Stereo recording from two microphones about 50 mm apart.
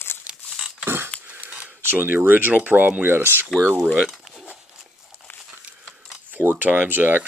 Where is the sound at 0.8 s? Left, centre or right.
Right.